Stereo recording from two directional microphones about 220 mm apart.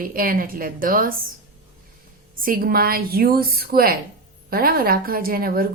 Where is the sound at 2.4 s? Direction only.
40° right (ahead or behind).